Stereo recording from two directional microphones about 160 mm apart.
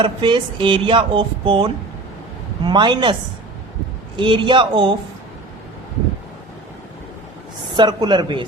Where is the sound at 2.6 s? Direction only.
30° right (ahead or behind).